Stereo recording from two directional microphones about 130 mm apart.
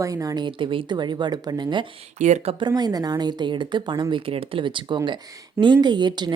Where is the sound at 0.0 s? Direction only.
25° right (ahead or behind).